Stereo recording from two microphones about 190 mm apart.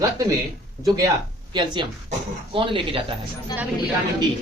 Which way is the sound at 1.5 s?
25° right (ahead or behind).